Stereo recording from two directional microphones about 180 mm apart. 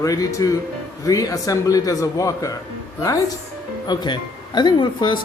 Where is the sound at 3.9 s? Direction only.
25° left (ahead or behind).